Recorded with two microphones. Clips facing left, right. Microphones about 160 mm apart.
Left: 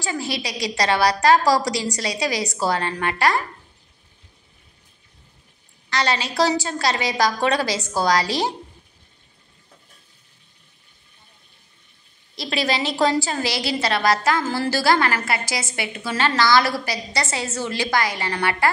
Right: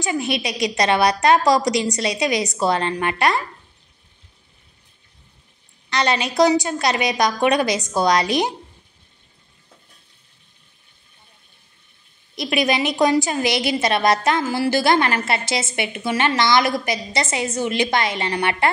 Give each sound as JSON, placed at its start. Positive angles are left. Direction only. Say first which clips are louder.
{"t": 0.0, "sound": "a woman's voice", "louder": "right 4 dB", "side_deg": -20}
{"t": 5.9, "sound": "a woman's voice", "louder": "right 2 dB", "side_deg": -20}
{"t": 12.4, "sound": "a woman's voice", "louder": "right 3 dB", "side_deg": -20}